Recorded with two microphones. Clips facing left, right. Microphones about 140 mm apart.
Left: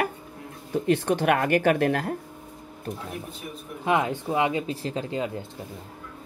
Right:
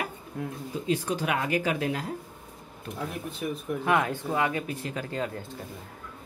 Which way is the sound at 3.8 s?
20° left (ahead or behind).